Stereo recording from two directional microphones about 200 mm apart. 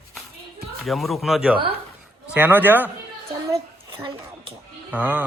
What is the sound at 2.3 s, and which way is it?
Music, 10° right (ahead or behind).